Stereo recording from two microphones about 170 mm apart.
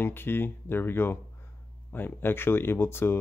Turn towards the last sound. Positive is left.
turn(degrees=15)  # may be behind; listen again after turning